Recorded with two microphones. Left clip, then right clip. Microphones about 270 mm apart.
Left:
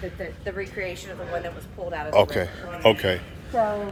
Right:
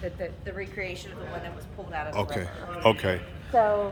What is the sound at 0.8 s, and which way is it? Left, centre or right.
A woman's voice, centre.